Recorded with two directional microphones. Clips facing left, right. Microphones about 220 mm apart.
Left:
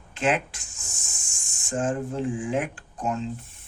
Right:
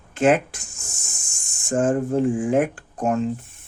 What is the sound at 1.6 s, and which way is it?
Speech, 50° right (ahead or behind).